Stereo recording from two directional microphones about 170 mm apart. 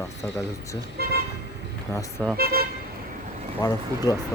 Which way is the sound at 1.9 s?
20° left (ahead or behind).